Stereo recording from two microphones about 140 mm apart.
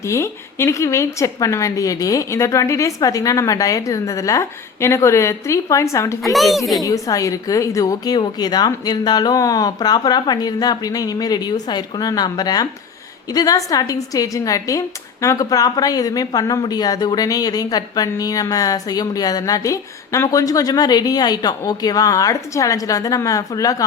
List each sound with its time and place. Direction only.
0.0 s a woman's voice: 20° left (ahead or behind)
6.3 s speech: centre (ahead or behind)
6.8 s a woman's voice: 25° left (ahead or behind)